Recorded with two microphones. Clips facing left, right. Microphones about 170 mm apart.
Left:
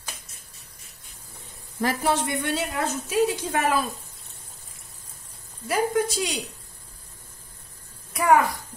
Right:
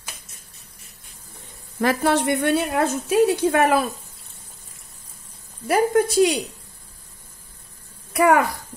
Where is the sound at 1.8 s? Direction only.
65° right (ahead or behind).